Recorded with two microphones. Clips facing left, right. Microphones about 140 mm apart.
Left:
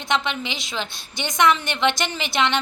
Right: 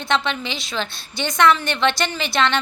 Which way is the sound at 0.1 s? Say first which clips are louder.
Right 2 dB; 15° left (ahead or behind).